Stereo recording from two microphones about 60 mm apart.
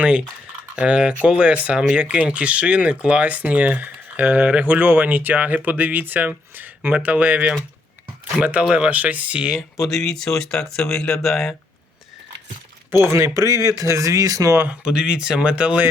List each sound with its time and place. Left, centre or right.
0.8 s speech: centre
8.4 s speech: centre
9.8 s speech: centre
13.1 s speech: right
13.8 s speech: right
14.7 s speech: centre